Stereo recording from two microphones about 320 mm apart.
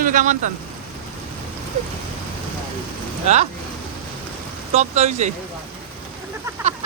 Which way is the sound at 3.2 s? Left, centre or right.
Right.